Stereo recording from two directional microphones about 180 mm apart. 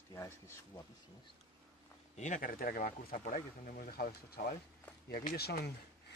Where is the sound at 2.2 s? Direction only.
45° left (ahead or behind).